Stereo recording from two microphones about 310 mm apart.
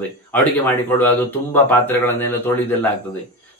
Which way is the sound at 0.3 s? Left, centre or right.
Centre.